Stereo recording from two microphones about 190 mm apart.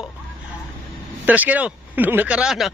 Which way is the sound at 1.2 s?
10° right (ahead or behind).